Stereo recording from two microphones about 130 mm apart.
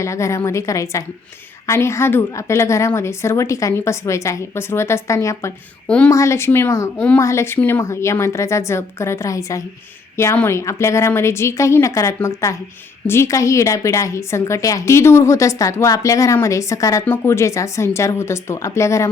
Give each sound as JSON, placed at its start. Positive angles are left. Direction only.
{"t": 0.0, "sound": "a woman's voice", "side_deg": 20}